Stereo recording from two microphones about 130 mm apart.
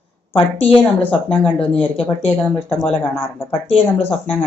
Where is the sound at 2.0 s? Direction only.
45° left (ahead or behind).